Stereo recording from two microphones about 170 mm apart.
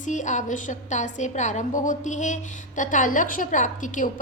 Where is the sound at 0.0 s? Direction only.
45° left (ahead or behind).